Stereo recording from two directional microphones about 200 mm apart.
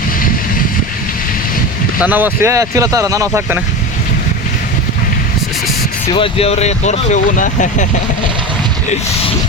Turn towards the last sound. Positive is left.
turn(degrees=40)  # may be behind; listen again after turning